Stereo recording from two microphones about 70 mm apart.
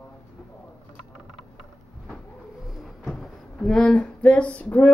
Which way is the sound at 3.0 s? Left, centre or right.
Centre.